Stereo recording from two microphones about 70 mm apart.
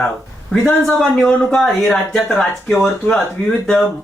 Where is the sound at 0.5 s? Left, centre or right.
Centre.